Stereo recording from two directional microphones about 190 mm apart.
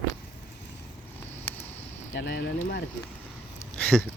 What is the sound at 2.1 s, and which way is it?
Speech, 70° left (ahead or behind).